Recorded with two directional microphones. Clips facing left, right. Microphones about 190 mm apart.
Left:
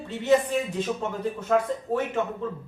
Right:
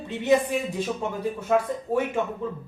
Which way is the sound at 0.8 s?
10° right (ahead or behind).